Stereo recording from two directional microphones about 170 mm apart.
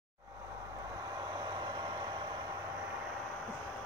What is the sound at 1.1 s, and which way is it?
Vehicle, 25° right (ahead or behind).